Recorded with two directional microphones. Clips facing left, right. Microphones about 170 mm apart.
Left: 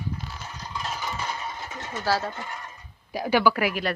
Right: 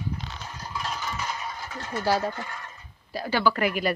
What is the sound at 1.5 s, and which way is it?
Sewing machine, 20° left (ahead or behind).